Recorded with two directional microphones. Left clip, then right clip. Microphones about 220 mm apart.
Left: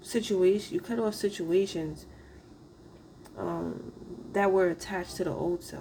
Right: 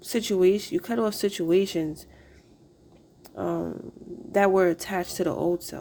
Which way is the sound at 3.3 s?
45° right (ahead or behind).